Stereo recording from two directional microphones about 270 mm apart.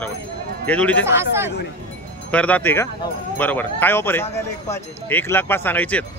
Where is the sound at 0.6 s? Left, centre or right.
Centre.